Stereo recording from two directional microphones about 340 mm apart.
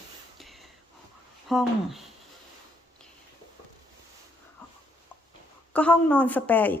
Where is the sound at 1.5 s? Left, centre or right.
Centre.